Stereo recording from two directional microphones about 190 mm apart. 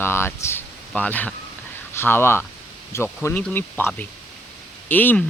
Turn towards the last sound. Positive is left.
turn(degrees=10)  # may be behind; listen again after turning